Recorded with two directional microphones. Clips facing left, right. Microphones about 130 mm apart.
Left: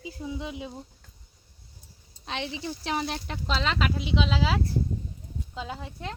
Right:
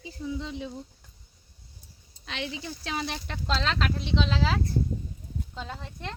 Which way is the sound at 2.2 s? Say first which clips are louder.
Left 2 dB; 25° left (ahead or behind).